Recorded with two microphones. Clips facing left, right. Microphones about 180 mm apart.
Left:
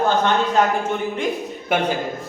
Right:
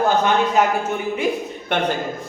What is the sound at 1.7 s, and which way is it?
Speech, 5° left (ahead or behind).